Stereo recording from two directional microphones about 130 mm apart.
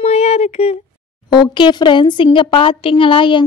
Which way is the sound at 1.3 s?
40° left (ahead or behind).